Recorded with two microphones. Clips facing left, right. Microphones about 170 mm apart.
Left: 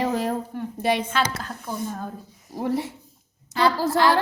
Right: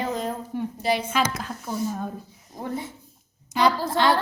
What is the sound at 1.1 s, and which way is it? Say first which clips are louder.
Speech: even; 10° right (ahead or behind).